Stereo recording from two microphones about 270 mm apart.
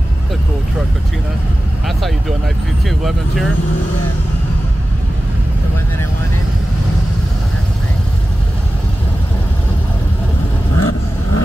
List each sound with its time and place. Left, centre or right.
1.9 s vehicle: centre
2.8 s speech: centre
10.8 s vehicle: left